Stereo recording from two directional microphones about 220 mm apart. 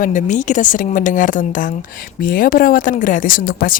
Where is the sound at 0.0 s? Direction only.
35° left (ahead or behind).